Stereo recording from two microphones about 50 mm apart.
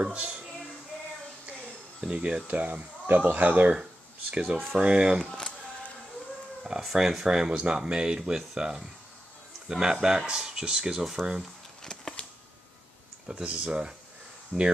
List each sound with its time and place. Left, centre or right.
0.0 s speech: right
2.0 s speech: centre
5.2 s speech: centre
6.6 s speech: centre
11.8 s a sound: centre
13.3 s speech: right
14.5 s speech: centre